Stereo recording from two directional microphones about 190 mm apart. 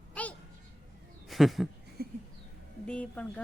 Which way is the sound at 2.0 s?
55° right (ahead or behind).